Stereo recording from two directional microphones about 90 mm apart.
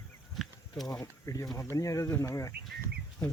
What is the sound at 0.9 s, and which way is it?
Speech, 40° left (ahead or behind).